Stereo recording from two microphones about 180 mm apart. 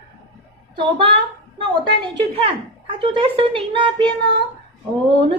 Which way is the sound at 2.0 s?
25° right (ahead or behind).